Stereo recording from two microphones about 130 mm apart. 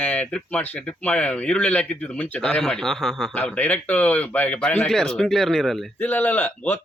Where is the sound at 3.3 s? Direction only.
15° left (ahead or behind).